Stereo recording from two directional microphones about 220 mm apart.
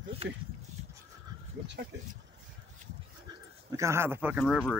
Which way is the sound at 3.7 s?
10° right (ahead or behind).